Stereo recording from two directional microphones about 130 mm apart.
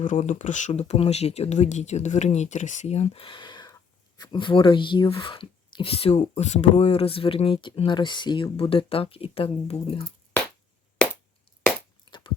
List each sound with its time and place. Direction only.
0.0 s speech: 70° left (ahead or behind); by 10.0 s 50° left (ahead or behind)
12.1 s chewing: 40° left (ahead or behind)